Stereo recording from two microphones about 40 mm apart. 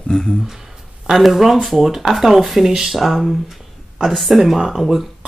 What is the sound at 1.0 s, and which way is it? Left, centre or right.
Speech, centre.